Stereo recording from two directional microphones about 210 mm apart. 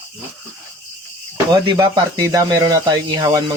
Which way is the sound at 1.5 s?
20° right (ahead or behind).